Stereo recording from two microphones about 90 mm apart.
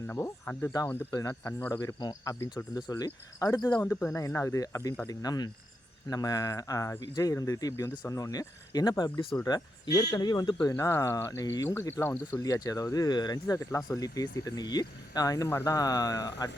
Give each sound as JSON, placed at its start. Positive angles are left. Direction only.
{"t": 0.1, "sound": "speech", "side_deg": 25}
{"t": 10.8, "sound": "speech", "side_deg": 30}
{"t": 12.4, "sound": "speech", "side_deg": 40}
{"t": 13.7, "sound": "speech", "side_deg": 35}